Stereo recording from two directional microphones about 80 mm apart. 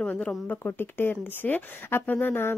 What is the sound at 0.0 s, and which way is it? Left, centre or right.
Speech, centre.